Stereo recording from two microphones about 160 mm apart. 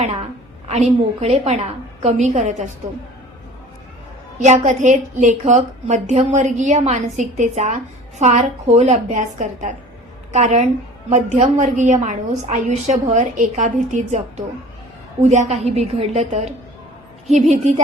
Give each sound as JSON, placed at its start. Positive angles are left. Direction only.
{"t": 0.7, "sound": "a woman's voice", "side_deg": -45}
{"t": 4.4, "sound": "a woman's voice", "side_deg": -45}